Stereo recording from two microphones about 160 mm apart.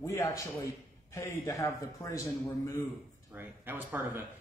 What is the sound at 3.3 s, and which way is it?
Speech, 10° right (ahead or behind).